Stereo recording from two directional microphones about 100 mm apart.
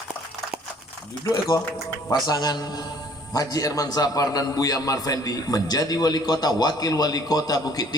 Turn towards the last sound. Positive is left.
turn(degrees=40)  # may be behind; listen again after turning